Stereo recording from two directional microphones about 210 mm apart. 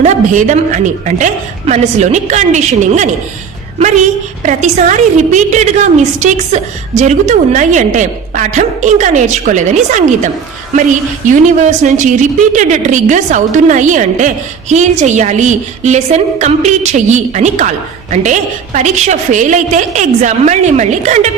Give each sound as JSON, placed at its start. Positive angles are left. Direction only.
{"t": 0.0, "sound": "a woman's voice", "side_deg": -35}
{"t": 4.4, "sound": "a woman's voice", "side_deg": -35}
{"t": 11.3, "sound": "a woman's voice", "side_deg": -35}